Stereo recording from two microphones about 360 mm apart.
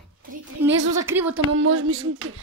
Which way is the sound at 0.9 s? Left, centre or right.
Centre.